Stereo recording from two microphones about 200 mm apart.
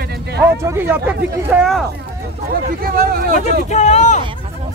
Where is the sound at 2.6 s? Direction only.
45° right (ahead or behind).